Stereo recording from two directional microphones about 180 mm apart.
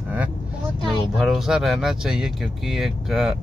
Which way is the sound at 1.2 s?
Centre (ahead or behind).